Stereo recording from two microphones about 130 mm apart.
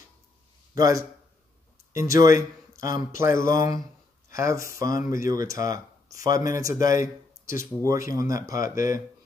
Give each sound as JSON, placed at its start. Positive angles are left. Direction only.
{"t": 0.7, "sound": "speech", "side_deg": -25}
{"t": 4.9, "sound": "speech", "side_deg": 90}
{"t": 5.2, "sound": "speech", "side_deg": -25}